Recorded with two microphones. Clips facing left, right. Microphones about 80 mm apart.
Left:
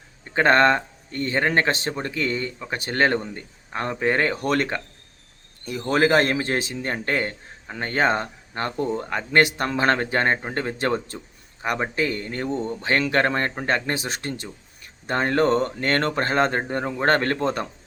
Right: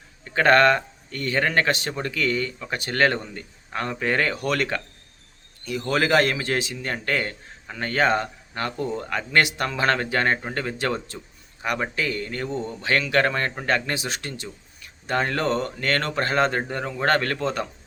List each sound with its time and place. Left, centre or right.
0.3 s speech: left